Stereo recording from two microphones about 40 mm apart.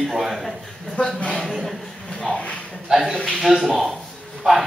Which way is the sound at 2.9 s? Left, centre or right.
Centre.